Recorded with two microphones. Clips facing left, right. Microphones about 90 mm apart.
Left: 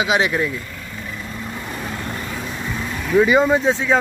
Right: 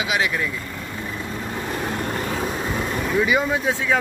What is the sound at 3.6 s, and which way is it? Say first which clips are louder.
Speech: left 4 dB; 20° left (ahead or behind).